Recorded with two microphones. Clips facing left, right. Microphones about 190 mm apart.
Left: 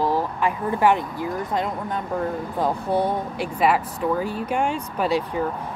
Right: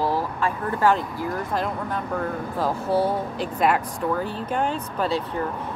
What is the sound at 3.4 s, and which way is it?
Speech, 5° left (ahead or behind).